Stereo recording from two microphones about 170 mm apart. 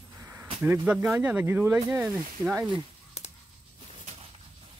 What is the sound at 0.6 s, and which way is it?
Speech, 10° right (ahead or behind).